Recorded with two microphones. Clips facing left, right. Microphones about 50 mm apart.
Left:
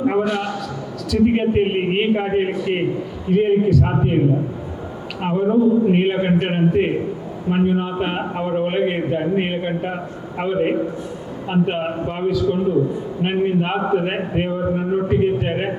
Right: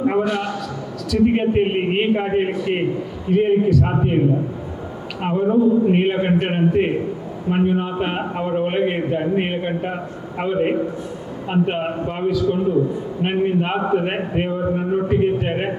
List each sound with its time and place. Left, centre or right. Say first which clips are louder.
0.0 s a man's voice: even; left